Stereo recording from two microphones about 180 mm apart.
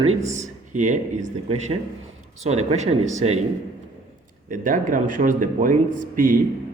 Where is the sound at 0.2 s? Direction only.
40° right (ahead or behind).